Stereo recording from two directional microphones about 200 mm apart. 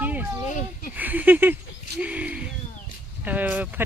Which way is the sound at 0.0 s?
10° right (ahead or behind).